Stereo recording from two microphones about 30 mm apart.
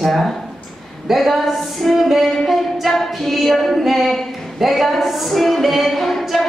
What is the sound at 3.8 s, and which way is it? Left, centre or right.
A woman's voice, centre.